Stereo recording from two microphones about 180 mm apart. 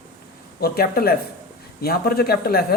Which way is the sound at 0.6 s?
60° left (ahead or behind).